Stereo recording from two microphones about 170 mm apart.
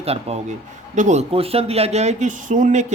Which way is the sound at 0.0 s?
35° right (ahead or behind).